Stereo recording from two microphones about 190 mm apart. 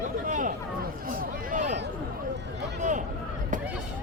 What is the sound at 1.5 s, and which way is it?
Speech, 40° right (ahead or behind).